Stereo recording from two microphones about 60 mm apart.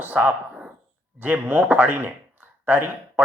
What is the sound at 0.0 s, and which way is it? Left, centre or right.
Speech, right.